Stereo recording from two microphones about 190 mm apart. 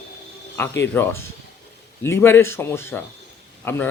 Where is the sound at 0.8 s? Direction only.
10° left (ahead or behind).